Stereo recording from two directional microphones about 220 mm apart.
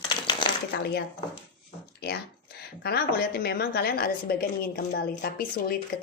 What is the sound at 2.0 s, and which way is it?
Speech, 45° left (ahead or behind).